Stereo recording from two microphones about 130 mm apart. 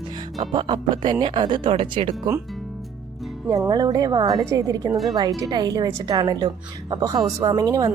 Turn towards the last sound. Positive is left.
turn(degrees=-30)  # may be behind; listen again after turning